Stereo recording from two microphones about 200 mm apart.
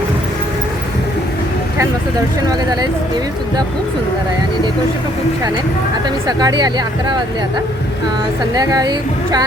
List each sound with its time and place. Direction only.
6.2 s speech: 20° right (ahead or behind)
8.5 s speech: 20° right (ahead or behind)